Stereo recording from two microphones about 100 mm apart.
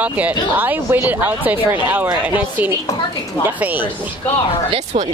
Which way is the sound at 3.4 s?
20° right (ahead or behind).